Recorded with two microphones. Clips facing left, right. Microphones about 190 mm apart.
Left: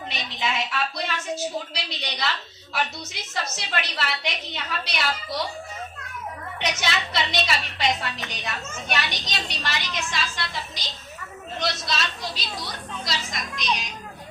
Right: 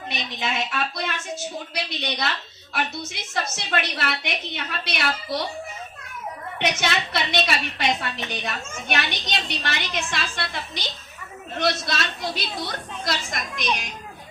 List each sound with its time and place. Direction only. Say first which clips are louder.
0.1 s a woman's voice: right 1 dB; 55° right (ahead or behind)
6.6 s a woman's voice: right 3 dB; 55° right (ahead or behind)